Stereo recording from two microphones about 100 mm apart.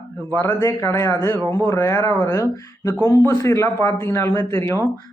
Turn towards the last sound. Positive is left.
turn(degrees=25)  # may be behind; listen again after turning